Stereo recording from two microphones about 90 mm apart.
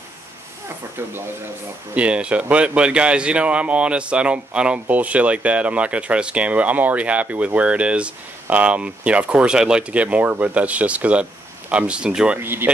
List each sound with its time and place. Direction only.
2.0 s speech: 15° right (ahead or behind)
12.4 s speech: 25° right (ahead or behind)